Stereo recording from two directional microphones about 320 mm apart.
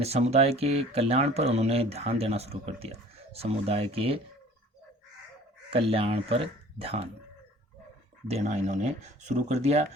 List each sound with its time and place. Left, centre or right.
0.0 s speech: centre
5.7 s speech: centre
8.3 s speech: right